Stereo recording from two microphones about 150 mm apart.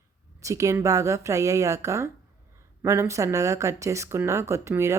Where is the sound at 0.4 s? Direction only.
20° right (ahead or behind).